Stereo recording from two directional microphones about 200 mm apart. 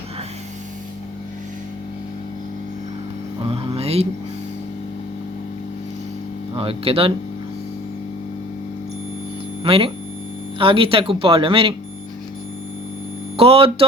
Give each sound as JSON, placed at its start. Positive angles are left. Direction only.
{"t": 3.4, "sound": "a sound", "side_deg": -30}
{"t": 6.6, "sound": "speech", "side_deg": -30}
{"t": 9.6, "sound": "speech", "side_deg": -30}
{"t": 13.3, "sound": "speech", "side_deg": -30}